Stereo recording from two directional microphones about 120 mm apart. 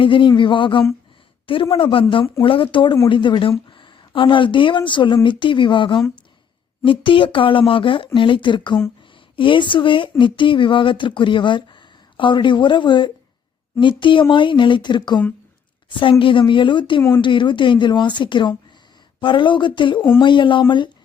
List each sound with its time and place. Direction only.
0.0 s speech: 45° left (ahead or behind)